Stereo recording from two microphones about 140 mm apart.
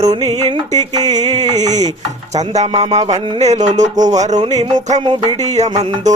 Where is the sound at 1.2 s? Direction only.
30° right (ahead or behind).